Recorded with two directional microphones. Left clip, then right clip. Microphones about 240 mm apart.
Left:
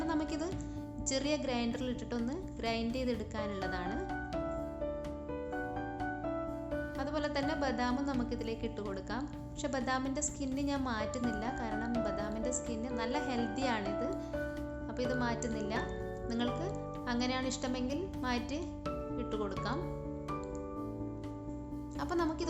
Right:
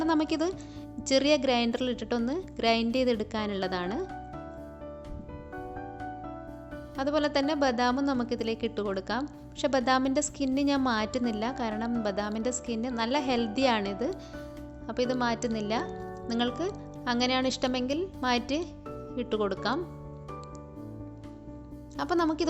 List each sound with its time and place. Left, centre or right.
0.0 s a woman's voice: right
6.9 s a woman's voice: right
21.9 s a woman's voice: right